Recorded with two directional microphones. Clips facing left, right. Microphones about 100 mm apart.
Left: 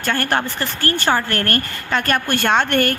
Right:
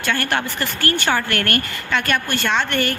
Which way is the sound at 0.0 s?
40° left (ahead or behind).